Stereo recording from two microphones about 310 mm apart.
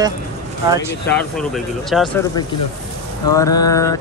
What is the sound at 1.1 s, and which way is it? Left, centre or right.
Speech, centre.